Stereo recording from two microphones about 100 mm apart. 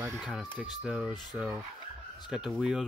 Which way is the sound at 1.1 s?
45° left (ahead or behind).